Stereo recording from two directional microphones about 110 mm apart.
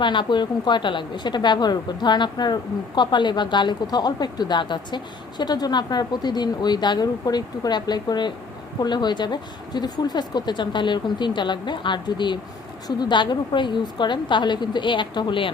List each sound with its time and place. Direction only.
0.0 s a woman's voice: 45° left (ahead or behind)